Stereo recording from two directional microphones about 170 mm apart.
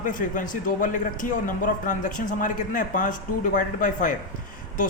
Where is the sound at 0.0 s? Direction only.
50° left (ahead or behind).